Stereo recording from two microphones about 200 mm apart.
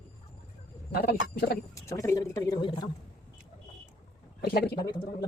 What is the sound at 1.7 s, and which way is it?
Speech, 15° left (ahead or behind).